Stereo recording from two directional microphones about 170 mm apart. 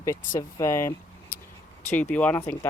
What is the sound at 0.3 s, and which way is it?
Speech, 15° left (ahead or behind).